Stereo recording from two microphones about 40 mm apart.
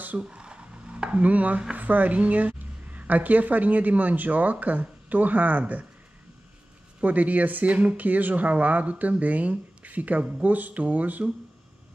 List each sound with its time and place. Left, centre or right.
0.2 s a sound: right
1.8 s speech: right
7.0 s speech: right